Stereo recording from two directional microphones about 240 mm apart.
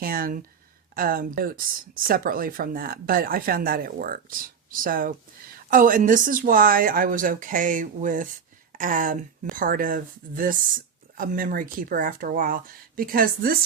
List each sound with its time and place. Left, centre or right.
0.0 s speech: right